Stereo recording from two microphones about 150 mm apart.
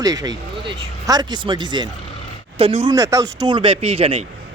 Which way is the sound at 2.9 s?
25° right (ahead or behind).